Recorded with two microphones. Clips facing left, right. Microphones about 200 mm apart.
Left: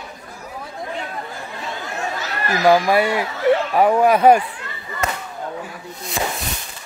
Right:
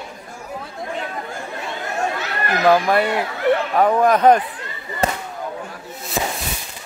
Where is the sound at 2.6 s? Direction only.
5° left (ahead or behind).